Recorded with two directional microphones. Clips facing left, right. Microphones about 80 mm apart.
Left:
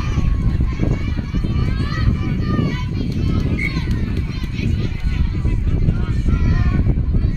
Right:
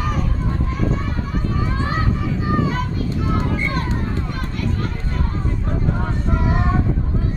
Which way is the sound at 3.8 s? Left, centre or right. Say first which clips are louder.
Even; right.